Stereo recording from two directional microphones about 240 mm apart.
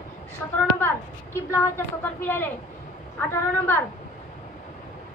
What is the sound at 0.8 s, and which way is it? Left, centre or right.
A woman's voice, centre.